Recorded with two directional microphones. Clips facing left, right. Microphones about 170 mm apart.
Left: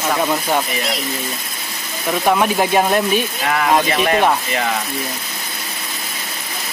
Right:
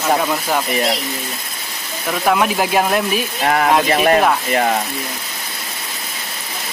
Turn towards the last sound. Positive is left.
turn(degrees=-45)  # may be behind; listen again after turning